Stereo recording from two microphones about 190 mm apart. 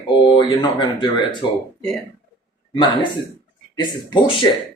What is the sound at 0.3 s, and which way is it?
A man's voice, 25° left (ahead or behind).